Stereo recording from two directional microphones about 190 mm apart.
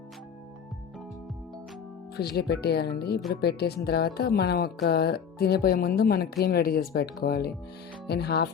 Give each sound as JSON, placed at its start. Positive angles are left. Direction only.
{"t": 2.1, "sound": "speech", "side_deg": 55}